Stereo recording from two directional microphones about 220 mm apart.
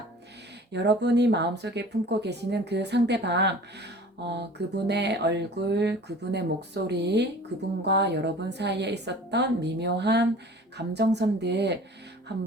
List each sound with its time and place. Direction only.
0.7 s a woman's voice: 50° right (ahead or behind)